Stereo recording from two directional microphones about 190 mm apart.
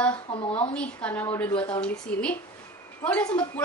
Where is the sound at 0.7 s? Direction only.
5° left (ahead or behind).